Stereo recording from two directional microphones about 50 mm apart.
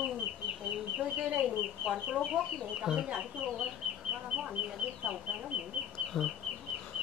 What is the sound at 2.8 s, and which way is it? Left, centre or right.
Speech, centre.